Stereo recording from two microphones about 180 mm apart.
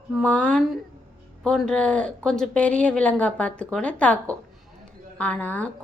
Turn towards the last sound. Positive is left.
turn(degrees=10)  # may be behind; listen again after turning